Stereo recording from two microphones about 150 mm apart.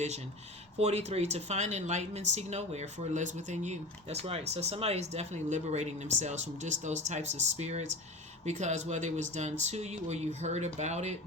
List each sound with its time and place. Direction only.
0.8 s speech: 45° right (ahead or behind)